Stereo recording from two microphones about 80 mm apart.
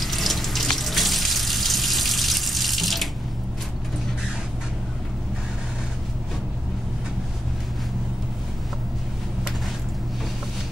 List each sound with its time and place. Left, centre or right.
0.0 s water tap: centre